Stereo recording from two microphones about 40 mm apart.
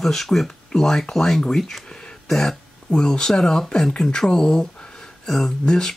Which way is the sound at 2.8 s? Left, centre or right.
Centre.